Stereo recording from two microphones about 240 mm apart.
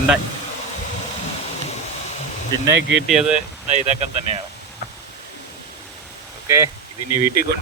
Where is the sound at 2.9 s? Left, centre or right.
Centre.